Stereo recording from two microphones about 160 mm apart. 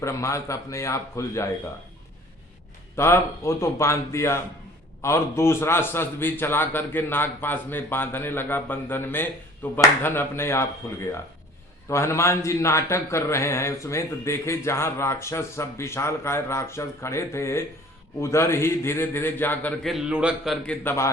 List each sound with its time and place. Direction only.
0.0 s a man's voice: 20° left (ahead or behind)
2.9 s a man's voice: 15° left (ahead or behind)
11.9 s a man's voice: 15° left (ahead or behind)
19.8 s a man's voice: centre (ahead or behind)
20.8 s a man's voice: 15° left (ahead or behind)